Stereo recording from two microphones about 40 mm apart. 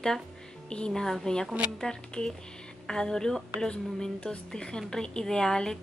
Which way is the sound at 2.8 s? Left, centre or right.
Centre.